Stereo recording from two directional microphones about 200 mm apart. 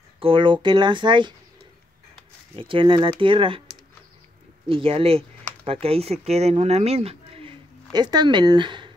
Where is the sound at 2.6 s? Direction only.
25° right (ahead or behind).